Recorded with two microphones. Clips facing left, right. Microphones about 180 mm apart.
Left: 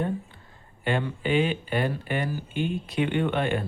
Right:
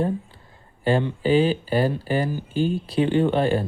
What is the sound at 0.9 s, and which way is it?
Speech, 35° right (ahead or behind).